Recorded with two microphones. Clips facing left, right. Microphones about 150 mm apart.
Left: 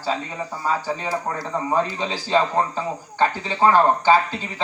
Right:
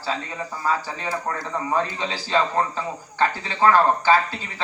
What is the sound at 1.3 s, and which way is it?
A man's voice, 20° left (ahead or behind).